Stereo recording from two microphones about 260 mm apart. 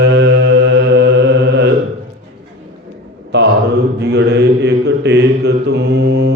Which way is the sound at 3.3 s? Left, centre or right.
Right.